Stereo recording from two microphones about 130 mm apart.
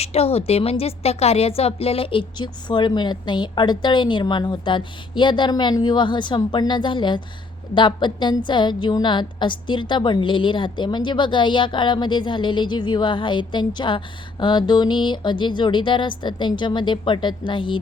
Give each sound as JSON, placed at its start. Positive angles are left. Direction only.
{"t": 0.0, "sound": "a woman's voice", "side_deg": 50}